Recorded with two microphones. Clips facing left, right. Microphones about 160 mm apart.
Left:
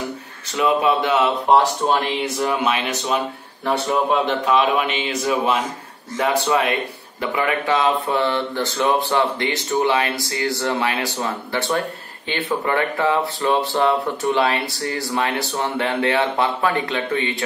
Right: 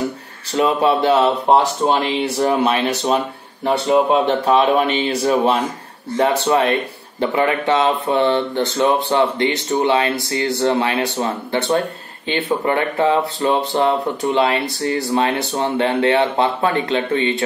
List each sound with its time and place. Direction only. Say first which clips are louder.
0.5 s speech: right 2 dB; 35° right (ahead or behind)
3.6 s speech: right 5 dB; 20° right (ahead or behind)
4.3 s speech: right 3 dB; 35° right (ahead or behind)